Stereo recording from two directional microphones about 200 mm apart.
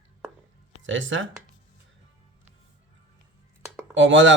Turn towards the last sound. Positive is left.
turn(degrees=-70)  # may be behind; listen again after turning